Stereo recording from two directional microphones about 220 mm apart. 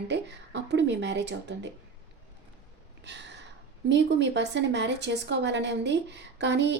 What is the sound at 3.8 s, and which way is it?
Speech, 55° right (ahead or behind).